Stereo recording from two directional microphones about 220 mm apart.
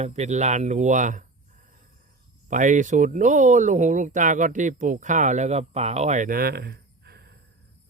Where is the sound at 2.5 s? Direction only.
35° right (ahead or behind).